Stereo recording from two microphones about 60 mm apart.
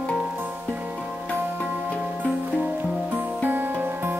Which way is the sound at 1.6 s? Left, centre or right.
Right.